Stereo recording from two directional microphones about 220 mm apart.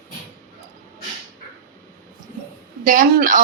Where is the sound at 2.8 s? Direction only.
40° right (ahead or behind).